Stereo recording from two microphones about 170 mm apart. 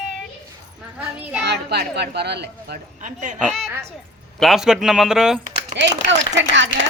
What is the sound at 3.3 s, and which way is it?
Speech, centre (ahead or behind).